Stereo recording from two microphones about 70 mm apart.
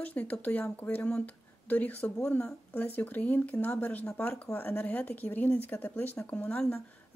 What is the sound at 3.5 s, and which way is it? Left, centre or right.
Speech, left.